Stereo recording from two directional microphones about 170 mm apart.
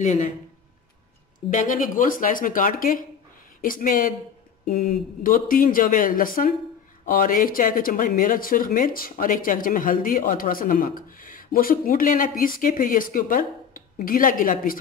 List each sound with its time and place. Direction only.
0.0 s speech: 45° left (ahead or behind)
1.5 s speech: 50° left (ahead or behind)